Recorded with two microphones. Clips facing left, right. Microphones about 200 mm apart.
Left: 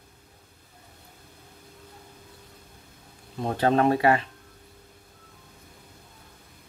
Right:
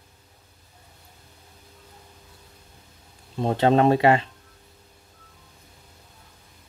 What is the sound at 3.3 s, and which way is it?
Speech, 25° right (ahead or behind).